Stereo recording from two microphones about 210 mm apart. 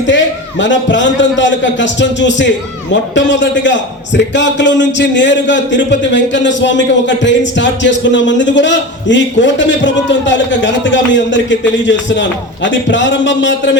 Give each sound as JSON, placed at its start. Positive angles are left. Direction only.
{"t": 0.1, "sound": "a man's voice", "side_deg": 60}
{"t": 12.6, "sound": "a man's voice", "side_deg": 60}